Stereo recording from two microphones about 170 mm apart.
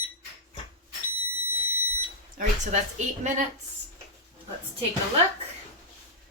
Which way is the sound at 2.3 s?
45° right (ahead or behind).